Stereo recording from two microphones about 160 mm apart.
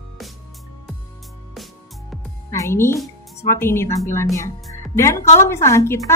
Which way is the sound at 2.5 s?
20° left (ahead or behind).